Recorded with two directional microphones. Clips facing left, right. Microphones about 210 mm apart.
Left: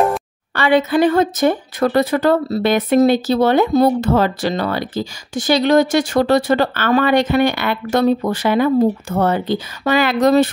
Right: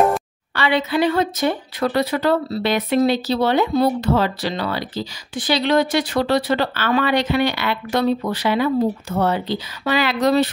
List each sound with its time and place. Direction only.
0.6 s speech: 50° left (ahead or behind)